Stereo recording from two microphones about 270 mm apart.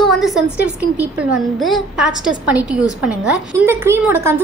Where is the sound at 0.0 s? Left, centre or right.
Centre.